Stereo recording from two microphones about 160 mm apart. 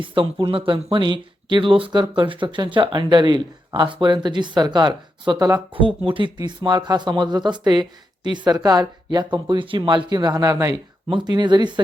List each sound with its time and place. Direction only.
0.0 s speech: 30° right (ahead or behind)